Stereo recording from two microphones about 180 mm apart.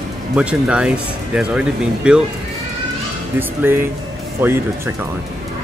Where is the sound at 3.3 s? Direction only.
10° right (ahead or behind).